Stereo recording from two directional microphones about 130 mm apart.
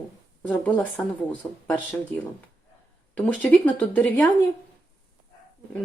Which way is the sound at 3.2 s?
10° left (ahead or behind).